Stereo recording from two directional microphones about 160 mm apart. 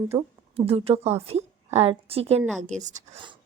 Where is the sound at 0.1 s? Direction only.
40° right (ahead or behind).